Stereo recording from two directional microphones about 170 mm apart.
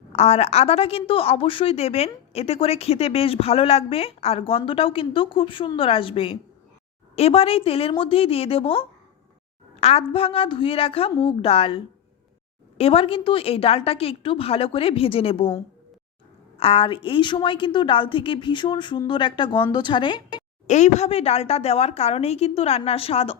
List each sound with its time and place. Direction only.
0.1 s a woman's voice: 40° left (ahead or behind)
9.8 s a woman's voice: 35° left (ahead or behind)
16.6 s a woman's voice: 35° left (ahead or behind)
20.7 s a woman's voice: 40° left (ahead or behind)